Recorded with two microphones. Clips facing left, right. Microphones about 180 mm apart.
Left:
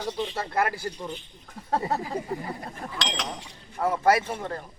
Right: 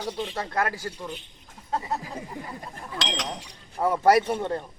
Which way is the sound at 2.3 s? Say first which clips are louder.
Left 6 dB; 65° left (ahead or behind).